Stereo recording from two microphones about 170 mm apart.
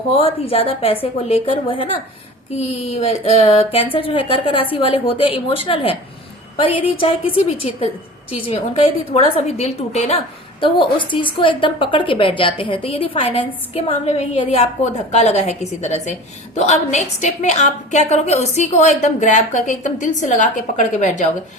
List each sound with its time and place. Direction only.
0.1 s a woman's voice: 35° left (ahead or behind)